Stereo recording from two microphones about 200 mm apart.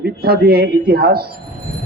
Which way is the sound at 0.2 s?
50° right (ahead or behind).